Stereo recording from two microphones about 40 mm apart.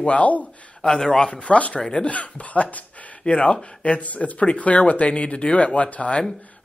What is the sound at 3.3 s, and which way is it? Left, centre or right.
Speech, left.